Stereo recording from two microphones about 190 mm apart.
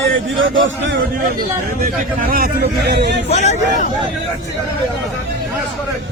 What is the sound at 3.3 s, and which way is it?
Speech, 35° left (ahead or behind).